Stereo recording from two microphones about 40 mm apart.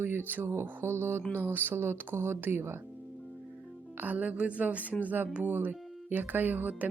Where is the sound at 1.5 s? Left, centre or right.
Right.